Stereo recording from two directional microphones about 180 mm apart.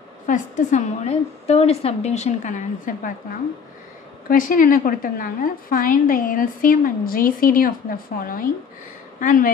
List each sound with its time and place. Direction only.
0.3 s a woman's voice: 45° left (ahead or behind)
4.3 s a woman's voice: 50° left (ahead or behind)